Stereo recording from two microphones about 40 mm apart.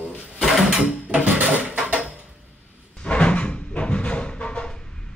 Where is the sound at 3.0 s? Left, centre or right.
Left.